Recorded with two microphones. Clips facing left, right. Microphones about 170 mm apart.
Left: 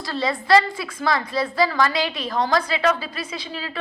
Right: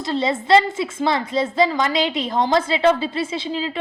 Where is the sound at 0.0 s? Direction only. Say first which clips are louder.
Right 4 dB; 20° right (ahead or behind).